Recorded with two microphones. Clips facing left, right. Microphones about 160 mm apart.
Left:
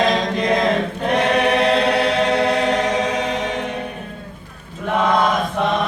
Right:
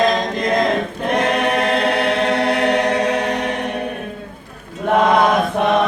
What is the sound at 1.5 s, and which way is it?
Choir, 55° right (ahead or behind).